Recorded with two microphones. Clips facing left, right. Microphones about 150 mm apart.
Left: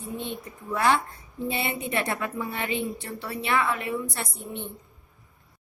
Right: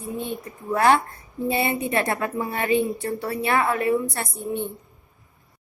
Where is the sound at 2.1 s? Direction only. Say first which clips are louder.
Right 4 dB; 35° right (ahead or behind).